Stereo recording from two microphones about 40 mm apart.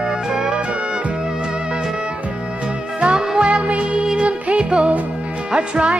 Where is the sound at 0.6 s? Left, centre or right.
Right.